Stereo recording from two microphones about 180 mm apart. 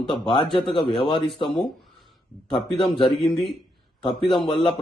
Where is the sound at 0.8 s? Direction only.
Centre (ahead or behind).